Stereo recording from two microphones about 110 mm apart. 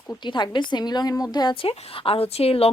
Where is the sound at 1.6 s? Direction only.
60° left (ahead or behind).